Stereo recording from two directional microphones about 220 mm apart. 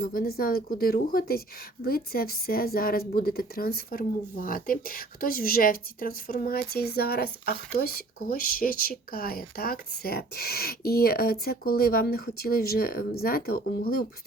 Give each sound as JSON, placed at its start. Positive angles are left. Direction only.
{"t": 0.0, "sound": "a woman's voice", "side_deg": 40}